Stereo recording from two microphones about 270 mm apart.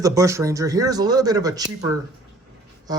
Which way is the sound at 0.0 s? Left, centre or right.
Centre.